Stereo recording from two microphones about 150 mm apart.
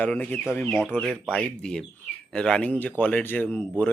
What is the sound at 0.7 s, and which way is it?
Speech, 5° right (ahead or behind).